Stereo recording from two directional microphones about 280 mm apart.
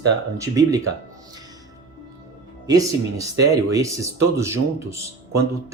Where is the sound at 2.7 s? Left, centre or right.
Centre.